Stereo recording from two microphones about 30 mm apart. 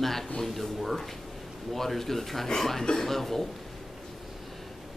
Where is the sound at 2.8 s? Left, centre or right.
Left.